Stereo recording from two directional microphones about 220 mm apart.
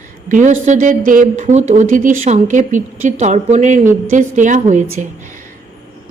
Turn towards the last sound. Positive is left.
turn(degrees=-35)  # may be behind; listen again after turning